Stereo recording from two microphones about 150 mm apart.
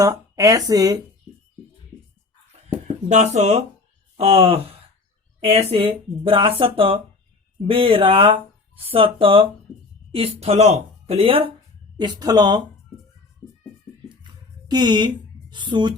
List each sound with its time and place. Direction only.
0.0 s speech: 20° right (ahead or behind)
2.6 s a sound: 50° right (ahead or behind)
4.2 s speech: 40° right (ahead or behind)
11.9 s speech: 30° right (ahead or behind)
14.7 s a woman's voice: 30° right (ahead or behind)